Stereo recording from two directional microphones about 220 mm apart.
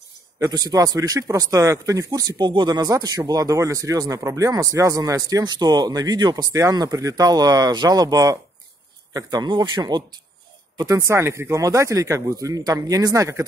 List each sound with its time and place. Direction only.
0.4 s a man's voice: 15° right (ahead or behind)